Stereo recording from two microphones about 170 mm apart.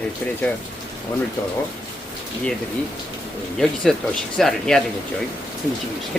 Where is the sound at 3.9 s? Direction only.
Centre (ahead or behind).